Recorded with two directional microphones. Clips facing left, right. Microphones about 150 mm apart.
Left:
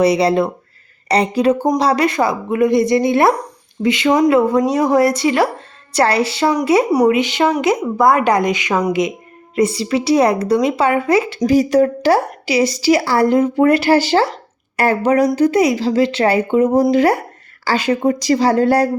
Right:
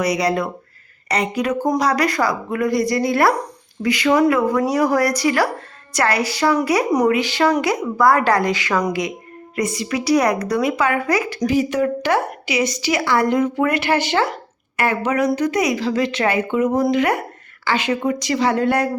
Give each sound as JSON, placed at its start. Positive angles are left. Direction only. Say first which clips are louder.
{"t": 0.0, "sound": "a woman's voice", "louder": "left 6 dB", "side_deg": 30}
{"t": 11.4, "sound": "a woman's voice", "louder": "left 5 dB", "side_deg": 40}